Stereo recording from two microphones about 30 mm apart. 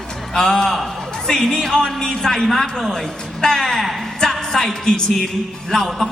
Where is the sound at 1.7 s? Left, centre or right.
Left.